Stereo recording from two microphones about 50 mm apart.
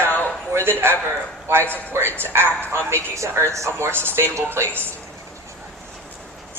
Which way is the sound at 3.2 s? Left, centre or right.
Right.